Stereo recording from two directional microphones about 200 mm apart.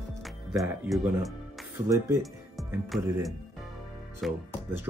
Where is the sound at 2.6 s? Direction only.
Centre (ahead or behind).